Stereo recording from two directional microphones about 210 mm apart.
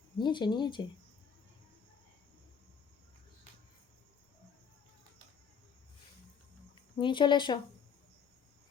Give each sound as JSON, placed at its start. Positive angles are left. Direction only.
{"t": 0.2, "sound": "speech", "side_deg": 20}
{"t": 6.9, "sound": "speech", "side_deg": 20}